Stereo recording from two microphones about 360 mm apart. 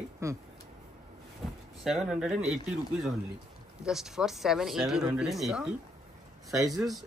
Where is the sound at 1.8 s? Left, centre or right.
Centre.